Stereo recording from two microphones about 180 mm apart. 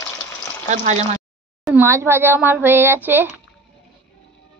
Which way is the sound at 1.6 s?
10° right (ahead or behind).